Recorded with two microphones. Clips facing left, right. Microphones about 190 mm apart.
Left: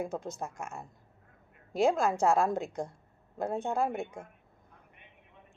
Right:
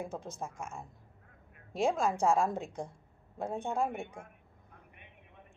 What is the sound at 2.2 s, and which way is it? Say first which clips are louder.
A woman's voice: left 2 dB; centre (ahead or behind).